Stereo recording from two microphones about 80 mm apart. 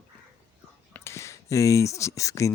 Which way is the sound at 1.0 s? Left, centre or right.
Left.